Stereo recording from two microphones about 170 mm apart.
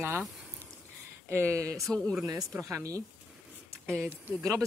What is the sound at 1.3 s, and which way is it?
Speech, 15° right (ahead or behind).